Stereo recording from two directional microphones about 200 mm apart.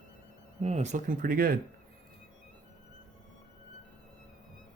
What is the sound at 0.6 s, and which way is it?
Speech, 35° right (ahead or behind).